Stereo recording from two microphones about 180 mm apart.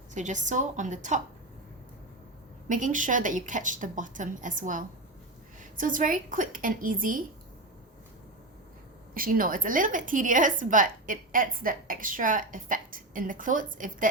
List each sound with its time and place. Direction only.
0.1 s a woman's voice: 40° right (ahead or behind)
2.6 s a woman's voice: 45° right (ahead or behind)
9.1 s a woman's voice: 50° right (ahead or behind)